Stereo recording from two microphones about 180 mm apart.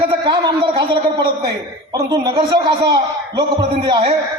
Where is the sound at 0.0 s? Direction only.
25° right (ahead or behind).